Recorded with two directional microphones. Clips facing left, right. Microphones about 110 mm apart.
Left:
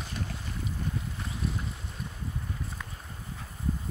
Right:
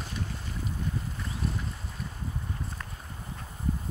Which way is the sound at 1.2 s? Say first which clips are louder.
Even; centre (ahead or behind).